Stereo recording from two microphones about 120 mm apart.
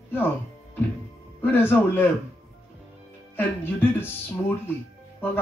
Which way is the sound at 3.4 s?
15° left (ahead or behind).